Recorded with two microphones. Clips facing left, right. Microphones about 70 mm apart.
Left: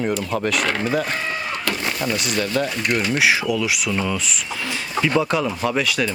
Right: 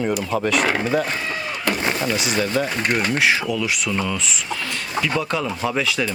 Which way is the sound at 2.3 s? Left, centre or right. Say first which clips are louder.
Even; centre.